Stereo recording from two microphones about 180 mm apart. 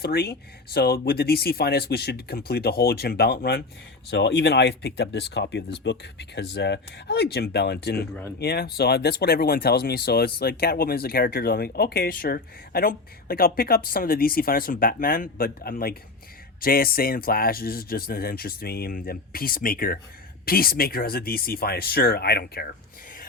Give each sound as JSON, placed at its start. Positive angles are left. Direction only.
{"t": 0.0, "sound": "speech", "side_deg": 60}